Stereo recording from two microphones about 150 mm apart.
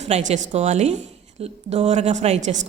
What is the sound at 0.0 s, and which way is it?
A woman's voice, 50° right (ahead or behind).